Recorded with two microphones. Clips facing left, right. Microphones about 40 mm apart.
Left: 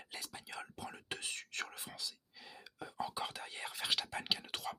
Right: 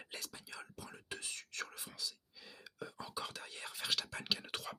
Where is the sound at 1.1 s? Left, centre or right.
Left.